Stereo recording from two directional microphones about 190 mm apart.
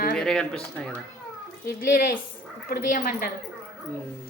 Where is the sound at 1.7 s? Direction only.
50° left (ahead or behind).